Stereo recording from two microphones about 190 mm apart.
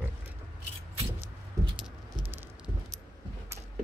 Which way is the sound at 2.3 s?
10° right (ahead or behind).